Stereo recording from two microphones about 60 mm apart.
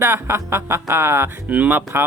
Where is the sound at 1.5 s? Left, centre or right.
Right.